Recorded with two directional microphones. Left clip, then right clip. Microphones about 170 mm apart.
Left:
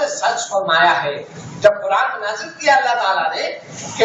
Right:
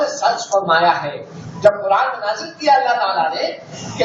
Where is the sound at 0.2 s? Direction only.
20° left (ahead or behind).